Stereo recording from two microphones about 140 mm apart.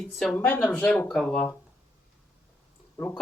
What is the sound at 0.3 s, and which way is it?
Speech, 10° left (ahead or behind).